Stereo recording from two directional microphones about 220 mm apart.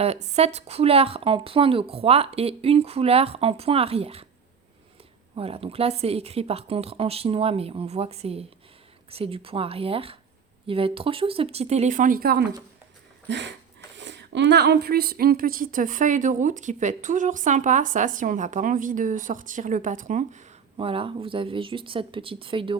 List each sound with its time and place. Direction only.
0.0 s speech: 30° right (ahead or behind)
5.3 s speech: 25° right (ahead or behind)